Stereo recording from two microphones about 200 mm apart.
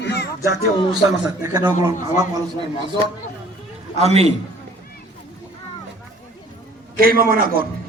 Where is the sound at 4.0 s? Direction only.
30° right (ahead or behind).